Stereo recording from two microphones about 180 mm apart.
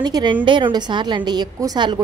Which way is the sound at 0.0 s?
25° right (ahead or behind).